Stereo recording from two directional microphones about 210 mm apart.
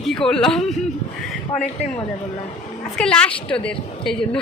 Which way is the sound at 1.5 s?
35° left (ahead or behind).